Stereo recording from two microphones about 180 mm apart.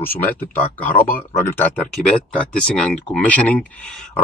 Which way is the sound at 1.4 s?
10° left (ahead or behind).